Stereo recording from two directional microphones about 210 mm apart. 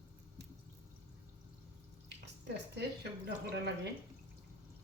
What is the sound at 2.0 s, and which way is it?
Speech, 55° right (ahead or behind).